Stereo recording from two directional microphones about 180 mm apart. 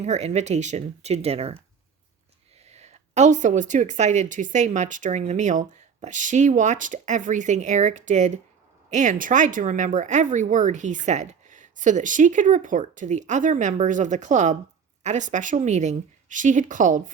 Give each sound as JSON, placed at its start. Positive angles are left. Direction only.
{"t": 0.0, "sound": "speech", "side_deg": -40}
{"t": 2.6, "sound": "a woman's voice", "side_deg": -35}